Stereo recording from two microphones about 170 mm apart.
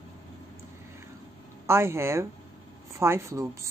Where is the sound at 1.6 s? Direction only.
15° right (ahead or behind).